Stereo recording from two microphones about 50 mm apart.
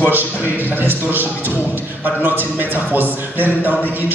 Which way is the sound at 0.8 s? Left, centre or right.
Right.